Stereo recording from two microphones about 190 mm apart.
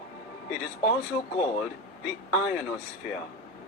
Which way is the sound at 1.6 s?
5° right (ahead or behind).